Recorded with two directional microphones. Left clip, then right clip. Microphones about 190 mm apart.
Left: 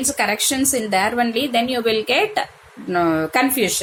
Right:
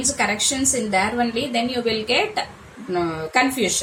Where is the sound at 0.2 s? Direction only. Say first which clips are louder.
Left 3 dB; 45° left (ahead or behind).